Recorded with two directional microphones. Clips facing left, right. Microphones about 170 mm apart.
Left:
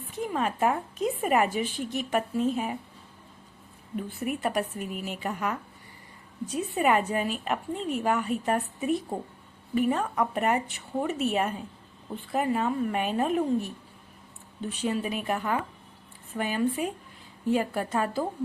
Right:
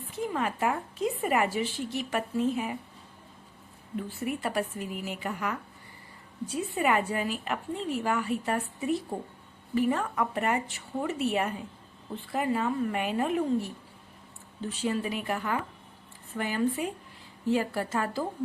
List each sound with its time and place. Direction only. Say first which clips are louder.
0.1 s speech: left 1 dB; 20° left (ahead or behind)
4.4 s speech: left 2 dB; 20° left (ahead or behind)
14.7 s a woman's voice: left 1 dB; 20° left (ahead or behind)